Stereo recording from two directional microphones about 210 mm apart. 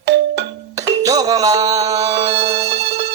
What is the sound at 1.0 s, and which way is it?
Music, 15° right (ahead or behind).